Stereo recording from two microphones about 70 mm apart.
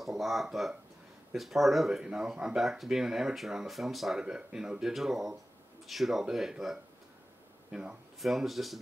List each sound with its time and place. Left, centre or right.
0.0 s speech: centre
8.2 s speech: centre